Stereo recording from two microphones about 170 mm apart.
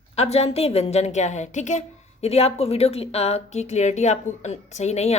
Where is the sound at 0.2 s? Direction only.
40° left (ahead or behind).